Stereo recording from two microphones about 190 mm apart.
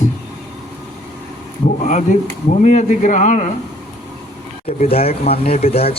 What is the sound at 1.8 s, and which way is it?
Speech, 40° left (ahead or behind).